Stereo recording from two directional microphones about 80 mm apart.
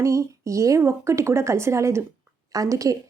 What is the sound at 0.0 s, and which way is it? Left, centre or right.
A woman's voice, right.